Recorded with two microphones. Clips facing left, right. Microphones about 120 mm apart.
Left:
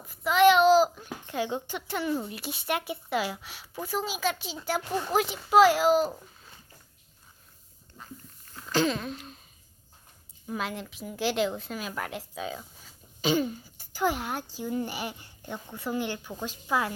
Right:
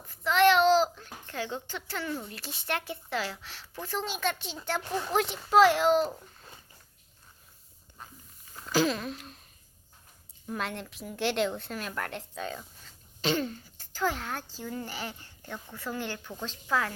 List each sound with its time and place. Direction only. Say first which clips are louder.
0.1 s a child's voice: left 2 dB; 10° left (ahead or behind)
8.4 s a sound: even; 5° right (ahead or behind)
10.4 s a woman's voice: left 1 dB; 5° left (ahead or behind)